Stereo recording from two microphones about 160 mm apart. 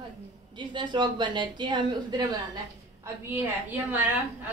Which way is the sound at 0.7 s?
30° right (ahead or behind).